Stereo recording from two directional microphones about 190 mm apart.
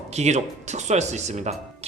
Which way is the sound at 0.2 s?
35° right (ahead or behind).